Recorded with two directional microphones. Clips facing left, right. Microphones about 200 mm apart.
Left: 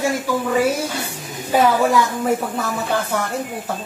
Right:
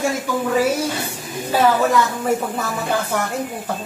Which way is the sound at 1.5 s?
15° left (ahead or behind).